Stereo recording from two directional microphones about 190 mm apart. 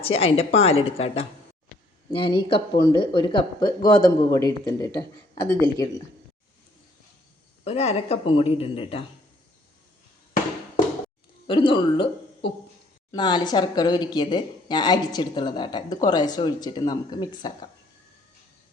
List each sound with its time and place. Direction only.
0.0 s a woman's voice: 30° left (ahead or behind)
7.6 s speech: 35° left (ahead or behind)
11.4 s a woman's voice: 25° left (ahead or behind)
13.1 s a woman's voice: 25° left (ahead or behind)